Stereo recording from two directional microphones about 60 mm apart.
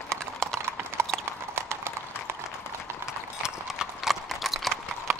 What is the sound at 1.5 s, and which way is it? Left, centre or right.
Clip-clop, right.